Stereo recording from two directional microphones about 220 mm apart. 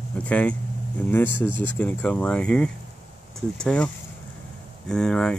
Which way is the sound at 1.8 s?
5° left (ahead or behind).